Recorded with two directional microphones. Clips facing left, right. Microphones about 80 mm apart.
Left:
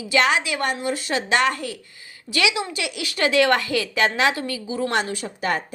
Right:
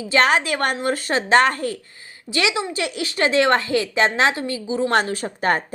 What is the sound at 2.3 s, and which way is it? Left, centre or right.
A woman's voice, right.